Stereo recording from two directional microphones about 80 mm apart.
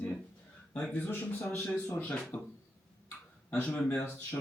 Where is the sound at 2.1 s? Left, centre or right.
Centre.